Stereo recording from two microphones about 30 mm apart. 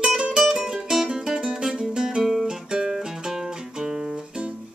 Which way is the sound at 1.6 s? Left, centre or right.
Centre.